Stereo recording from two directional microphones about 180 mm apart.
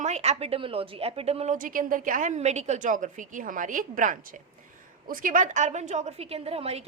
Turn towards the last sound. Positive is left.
turn(degrees=-35)  # may be behind; listen again after turning